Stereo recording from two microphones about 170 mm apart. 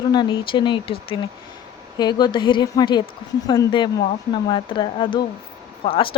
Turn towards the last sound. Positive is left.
turn(degrees=30)  # may be behind; listen again after turning